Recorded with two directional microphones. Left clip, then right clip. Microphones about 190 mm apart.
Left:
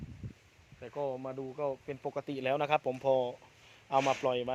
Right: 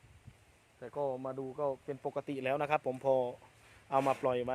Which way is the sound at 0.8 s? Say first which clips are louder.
Even; 10° left (ahead or behind).